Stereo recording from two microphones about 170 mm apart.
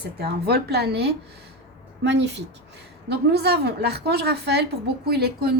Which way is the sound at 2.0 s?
90° right.